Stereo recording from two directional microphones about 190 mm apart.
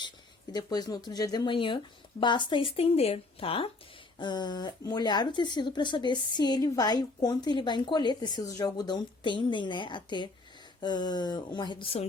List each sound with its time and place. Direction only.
0.5 s speech: 20° left (ahead or behind)